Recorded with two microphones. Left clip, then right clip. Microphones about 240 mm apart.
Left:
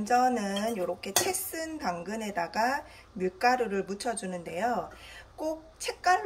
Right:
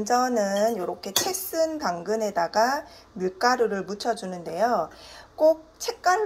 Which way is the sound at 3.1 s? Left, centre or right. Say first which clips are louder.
Right 3 dB; right.